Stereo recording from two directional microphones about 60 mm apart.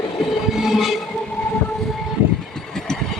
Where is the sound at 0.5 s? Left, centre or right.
Centre.